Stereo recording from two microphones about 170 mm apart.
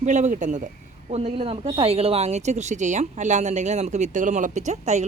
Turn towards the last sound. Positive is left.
turn(degrees=-45)  # may be behind; listen again after turning